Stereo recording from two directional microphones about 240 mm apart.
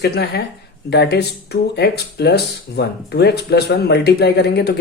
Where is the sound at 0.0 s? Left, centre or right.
Left.